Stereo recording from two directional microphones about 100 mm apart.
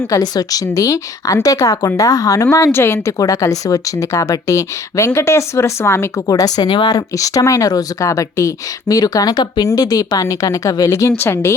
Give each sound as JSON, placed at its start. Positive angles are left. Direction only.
{"t": 0.1, "sound": "a woman's voice", "side_deg": 40}
{"t": 2.7, "sound": "a woman's voice", "side_deg": 25}
{"t": 11.2, "sound": "a woman's voice", "side_deg": 25}